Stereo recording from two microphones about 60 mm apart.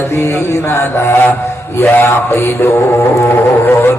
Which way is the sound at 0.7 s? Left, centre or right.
Left.